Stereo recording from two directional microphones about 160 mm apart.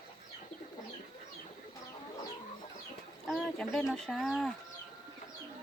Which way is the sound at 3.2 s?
5° left (ahead or behind).